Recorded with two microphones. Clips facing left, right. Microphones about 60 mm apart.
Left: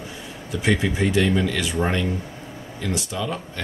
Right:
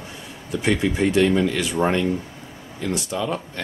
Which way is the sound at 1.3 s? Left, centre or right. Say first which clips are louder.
Right 2 dB; centre.